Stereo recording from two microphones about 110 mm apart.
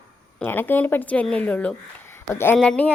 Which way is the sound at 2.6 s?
10° left (ahead or behind).